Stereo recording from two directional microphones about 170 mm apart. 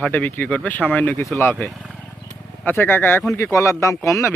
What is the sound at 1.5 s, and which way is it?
Speech, centre (ahead or behind).